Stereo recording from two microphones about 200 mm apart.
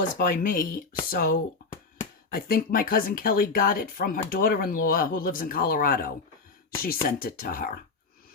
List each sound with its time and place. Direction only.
0.0 s speech: 40° left (ahead or behind)